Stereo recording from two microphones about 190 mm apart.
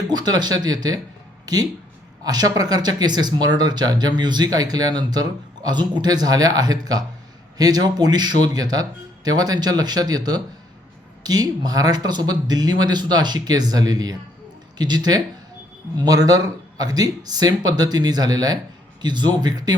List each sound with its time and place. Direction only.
0.1 s speech: 20° right (ahead or behind)
2.2 s speech: 20° right (ahead or behind)